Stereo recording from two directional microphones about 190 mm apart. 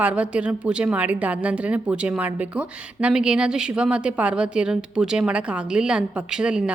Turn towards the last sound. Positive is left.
turn(degrees=-5)  # may be behind; listen again after turning